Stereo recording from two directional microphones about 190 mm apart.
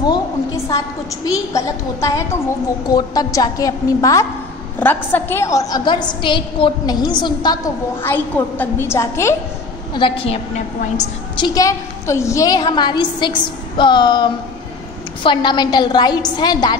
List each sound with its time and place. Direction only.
1.3 s a woman's voice: 15° left (ahead or behind)
9.9 s a woman's voice: 25° left (ahead or behind)